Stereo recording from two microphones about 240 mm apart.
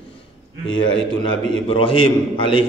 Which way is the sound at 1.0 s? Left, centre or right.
Centre.